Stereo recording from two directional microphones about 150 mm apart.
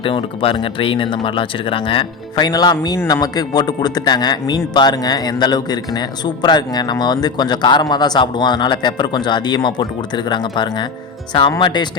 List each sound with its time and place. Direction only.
0.0 s a man's voice: 35° left (ahead or behind)